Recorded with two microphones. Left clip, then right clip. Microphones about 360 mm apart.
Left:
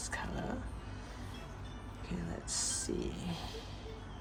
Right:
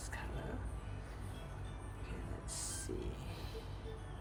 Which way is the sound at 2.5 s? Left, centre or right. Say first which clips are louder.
Left 8 dB; centre.